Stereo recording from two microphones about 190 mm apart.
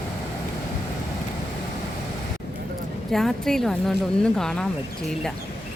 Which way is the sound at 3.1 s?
Centre (ahead or behind).